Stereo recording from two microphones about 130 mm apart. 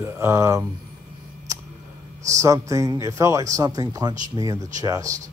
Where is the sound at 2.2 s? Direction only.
25° right (ahead or behind).